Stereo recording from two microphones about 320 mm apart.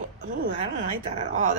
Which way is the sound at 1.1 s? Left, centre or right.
Right.